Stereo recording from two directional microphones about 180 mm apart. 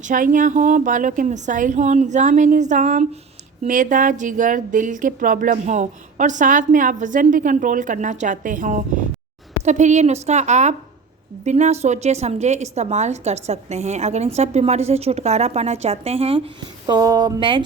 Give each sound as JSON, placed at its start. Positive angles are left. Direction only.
{"t": 0.0, "sound": "a woman's voice", "side_deg": -50}
{"t": 16.8, "sound": "speech", "side_deg": -20}